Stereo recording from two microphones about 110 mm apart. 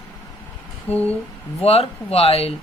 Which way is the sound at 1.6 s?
65° left (ahead or behind).